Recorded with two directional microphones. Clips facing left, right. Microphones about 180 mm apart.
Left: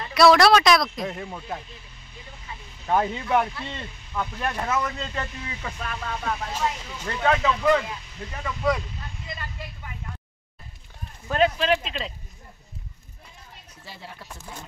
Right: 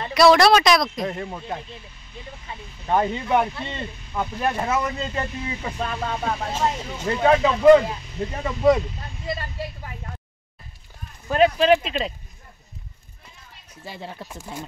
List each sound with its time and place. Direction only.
0.1 s speech: centre (ahead or behind)
2.9 s speech: centre (ahead or behind)
3.7 s speech: 20° right (ahead or behind)
4.7 s speech: 10° right (ahead or behind); by 8.8 s 30° right (ahead or behind)
9.3 s vehicle: 35° right (ahead or behind)
11.2 s speech: 10° right (ahead or behind)
13.8 s speech: 20° right (ahead or behind)